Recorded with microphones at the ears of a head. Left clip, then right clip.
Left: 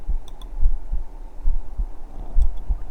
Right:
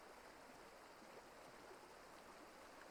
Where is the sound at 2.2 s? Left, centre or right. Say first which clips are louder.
Left 14 dB; left.